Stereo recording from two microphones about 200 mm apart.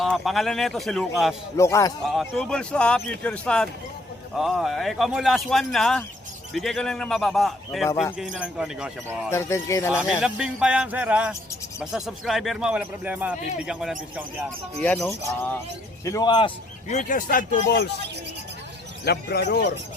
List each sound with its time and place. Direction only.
0.0 s speech: centre (ahead or behind)
1.5 s speech: 15° left (ahead or behind)
2.0 s speech: centre (ahead or behind)
9.3 s speech: 15° left (ahead or behind)
9.9 s speech: 5° right (ahead or behind)
14.8 s speech: 5° left (ahead or behind); by 16.5 s 20° left (ahead or behind)
16.9 s speech: 40° left (ahead or behind)
19.0 s speech: 55° left (ahead or behind)